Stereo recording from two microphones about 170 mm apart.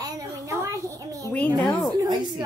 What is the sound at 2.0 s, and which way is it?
Speech, 25° right (ahead or behind).